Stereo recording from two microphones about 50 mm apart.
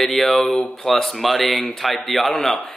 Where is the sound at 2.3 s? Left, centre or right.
Centre.